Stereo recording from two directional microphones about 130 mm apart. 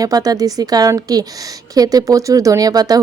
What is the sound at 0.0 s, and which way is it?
Speech, 30° right (ahead or behind).